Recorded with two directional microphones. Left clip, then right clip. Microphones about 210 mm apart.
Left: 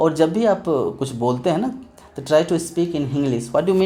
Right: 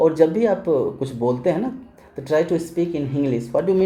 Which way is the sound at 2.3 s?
90° left.